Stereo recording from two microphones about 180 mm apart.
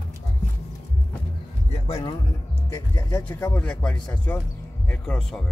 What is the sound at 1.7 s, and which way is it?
Speech, 35° left (ahead or behind).